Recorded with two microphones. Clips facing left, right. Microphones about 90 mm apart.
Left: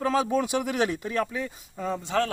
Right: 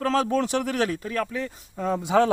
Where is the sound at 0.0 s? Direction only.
10° left (ahead or behind).